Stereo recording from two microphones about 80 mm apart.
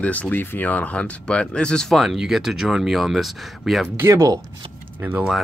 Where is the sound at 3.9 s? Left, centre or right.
Right.